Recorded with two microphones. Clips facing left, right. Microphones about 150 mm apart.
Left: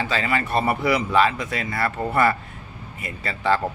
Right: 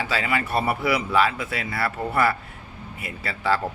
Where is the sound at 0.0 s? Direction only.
10° right (ahead or behind).